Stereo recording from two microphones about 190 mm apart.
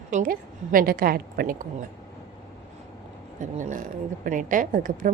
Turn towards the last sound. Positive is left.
turn(degrees=-45)  # may be behind; listen again after turning